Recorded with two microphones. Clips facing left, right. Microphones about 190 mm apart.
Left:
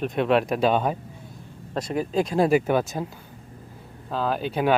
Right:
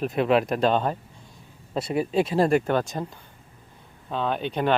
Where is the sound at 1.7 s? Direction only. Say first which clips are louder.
Right 1 dB; 5° right (ahead or behind).